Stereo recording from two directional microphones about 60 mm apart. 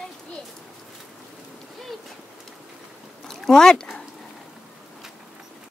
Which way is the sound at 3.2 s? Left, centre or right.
Centre.